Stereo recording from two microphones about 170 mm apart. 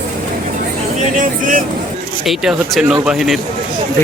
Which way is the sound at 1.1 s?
50° right (ahead or behind).